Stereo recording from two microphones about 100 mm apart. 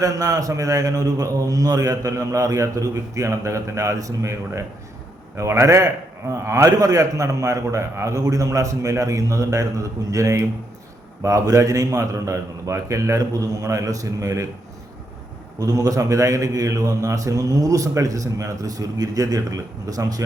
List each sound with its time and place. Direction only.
0.0 s a man's voice: 35° right (ahead or behind)
15.5 s a man's voice: 40° right (ahead or behind)